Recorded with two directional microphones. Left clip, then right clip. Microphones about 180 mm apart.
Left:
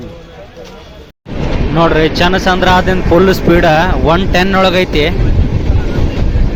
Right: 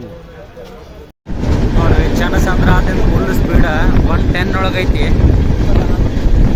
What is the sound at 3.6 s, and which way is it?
Speech, 35° left (ahead or behind).